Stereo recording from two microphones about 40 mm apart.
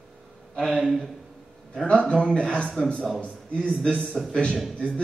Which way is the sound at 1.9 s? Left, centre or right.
Left.